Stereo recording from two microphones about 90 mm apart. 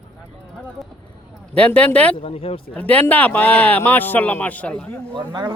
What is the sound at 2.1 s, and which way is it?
Speech, 90° left.